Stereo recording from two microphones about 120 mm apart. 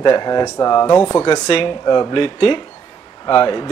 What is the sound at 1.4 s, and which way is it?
Speech, 50° left (ahead or behind).